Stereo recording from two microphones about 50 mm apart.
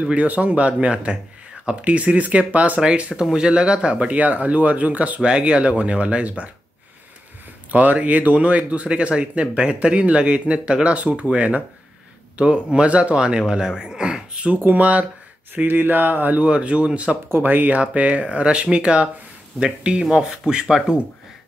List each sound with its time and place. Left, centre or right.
0.0 s speech: right
7.7 s speech: right
14.6 s speech: right
15.5 s speech: right
16.4 s speech: right
17.3 s speech: right; by 20.9 s centre